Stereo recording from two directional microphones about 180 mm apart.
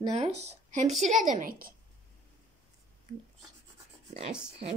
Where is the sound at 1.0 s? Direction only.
45° right (ahead or behind).